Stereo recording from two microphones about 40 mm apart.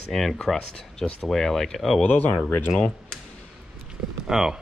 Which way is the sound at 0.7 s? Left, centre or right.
Left.